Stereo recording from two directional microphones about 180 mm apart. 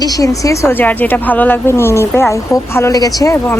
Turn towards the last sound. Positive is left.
turn(degrees=15)  # may be behind; listen again after turning